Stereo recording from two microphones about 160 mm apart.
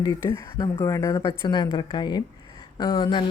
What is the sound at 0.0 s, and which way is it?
Speech, 25° left (ahead or behind).